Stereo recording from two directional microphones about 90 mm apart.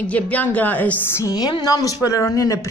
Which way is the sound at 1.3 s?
45° left (ahead or behind).